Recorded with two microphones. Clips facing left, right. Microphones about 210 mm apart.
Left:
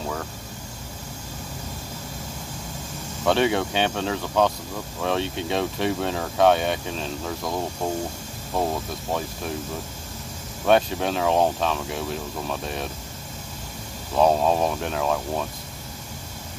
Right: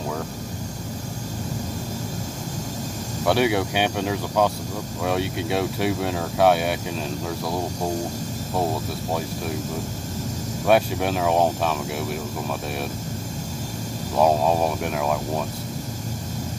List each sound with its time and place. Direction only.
3.3 s speech: 10° right (ahead or behind)
10.7 s speech: 10° right (ahead or behind)
14.1 s speech: 10° right (ahead or behind)